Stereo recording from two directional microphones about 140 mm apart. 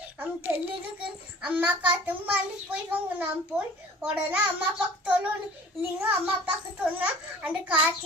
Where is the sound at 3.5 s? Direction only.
20° right (ahead or behind).